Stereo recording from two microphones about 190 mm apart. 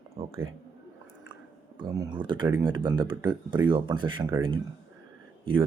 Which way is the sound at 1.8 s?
20° right (ahead or behind).